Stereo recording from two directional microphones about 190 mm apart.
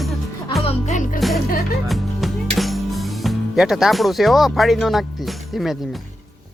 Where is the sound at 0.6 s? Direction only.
35° left (ahead or behind).